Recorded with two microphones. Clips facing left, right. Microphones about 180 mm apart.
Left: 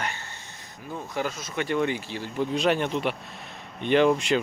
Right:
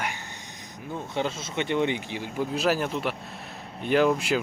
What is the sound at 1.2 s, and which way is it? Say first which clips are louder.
Speech: right 1 dB; 25° right (ahead or behind).